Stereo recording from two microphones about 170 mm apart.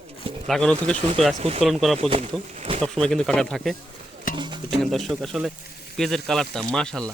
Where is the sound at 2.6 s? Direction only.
40° right (ahead or behind).